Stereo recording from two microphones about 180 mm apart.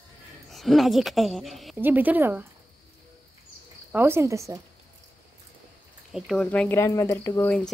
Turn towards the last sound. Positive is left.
turn(degrees=5)  # may be behind; listen again after turning